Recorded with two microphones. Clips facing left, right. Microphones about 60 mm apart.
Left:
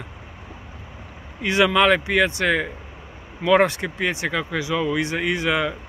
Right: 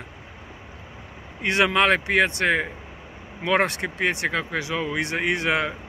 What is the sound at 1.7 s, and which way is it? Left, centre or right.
Speech, right.